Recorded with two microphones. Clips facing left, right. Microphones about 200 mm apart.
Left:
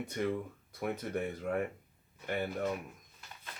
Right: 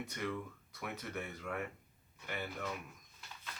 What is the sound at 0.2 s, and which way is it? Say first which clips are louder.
Speech: left 7 dB; 40° left (ahead or behind).